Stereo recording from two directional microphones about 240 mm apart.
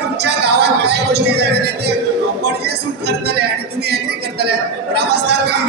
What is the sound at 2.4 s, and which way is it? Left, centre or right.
Speech, right.